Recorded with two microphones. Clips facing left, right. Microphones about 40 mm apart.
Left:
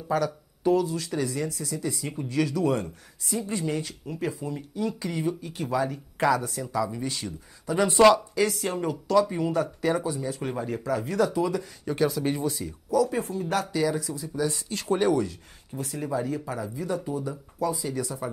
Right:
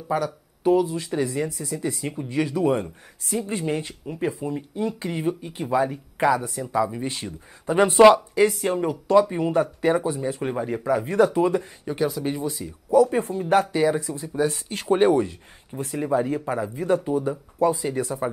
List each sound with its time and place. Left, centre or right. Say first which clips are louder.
0.1 s speech: right 1 dB; centre
6.7 s speech: right 5 dB; right
10.4 s speech: right 4 dB; right
11.8 s speech: even; centre
12.9 s speech: right 6 dB; right